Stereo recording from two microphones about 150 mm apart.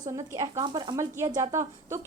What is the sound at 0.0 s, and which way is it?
A woman's voice, 20° right (ahead or behind).